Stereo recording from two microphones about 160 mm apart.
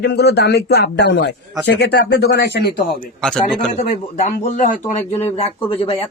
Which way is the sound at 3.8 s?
40° left (ahead or behind).